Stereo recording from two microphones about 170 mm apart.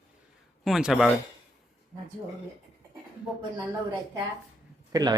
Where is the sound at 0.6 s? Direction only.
Centre (ahead or behind).